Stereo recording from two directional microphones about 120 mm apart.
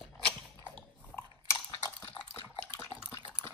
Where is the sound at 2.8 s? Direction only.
20° left (ahead or behind).